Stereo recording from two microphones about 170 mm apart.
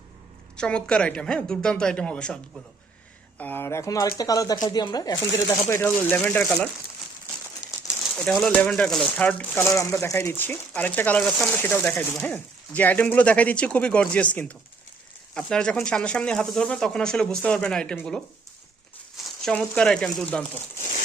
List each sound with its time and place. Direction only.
0.5 s speech: 5° left (ahead or behind)
8.1 s speech: 5° left (ahead or behind)